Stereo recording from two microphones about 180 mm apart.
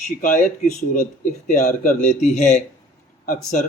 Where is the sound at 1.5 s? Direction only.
45° left (ahead or behind).